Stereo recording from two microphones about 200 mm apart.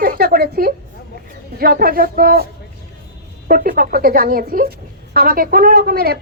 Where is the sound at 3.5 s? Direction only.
45° right (ahead or behind).